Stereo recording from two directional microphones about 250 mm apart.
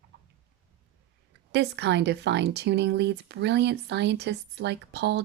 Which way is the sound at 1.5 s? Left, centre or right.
Right.